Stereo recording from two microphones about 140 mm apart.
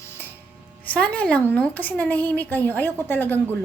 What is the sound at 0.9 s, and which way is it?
A woman's voice, 10° left (ahead or behind).